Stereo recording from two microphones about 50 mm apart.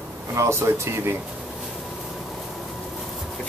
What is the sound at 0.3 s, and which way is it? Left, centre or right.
Speech, right.